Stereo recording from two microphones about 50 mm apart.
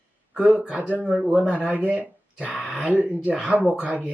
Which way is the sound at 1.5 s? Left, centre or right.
Right.